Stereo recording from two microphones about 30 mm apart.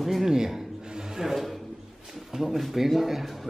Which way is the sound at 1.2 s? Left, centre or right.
Centre.